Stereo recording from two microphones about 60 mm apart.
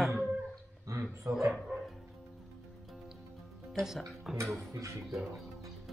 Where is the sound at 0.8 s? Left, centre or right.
Right.